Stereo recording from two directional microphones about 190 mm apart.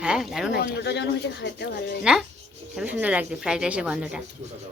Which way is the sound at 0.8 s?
60° left (ahead or behind).